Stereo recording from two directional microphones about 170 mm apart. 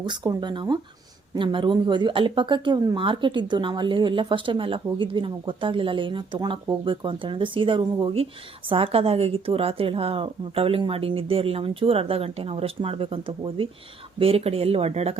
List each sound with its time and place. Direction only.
0.1 s speech: 25° right (ahead or behind)